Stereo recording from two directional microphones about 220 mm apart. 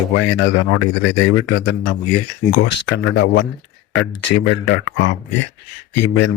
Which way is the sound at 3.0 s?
60° left (ahead or behind).